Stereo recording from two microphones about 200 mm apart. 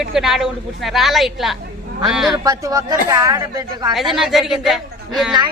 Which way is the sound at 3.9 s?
Centre (ahead or behind).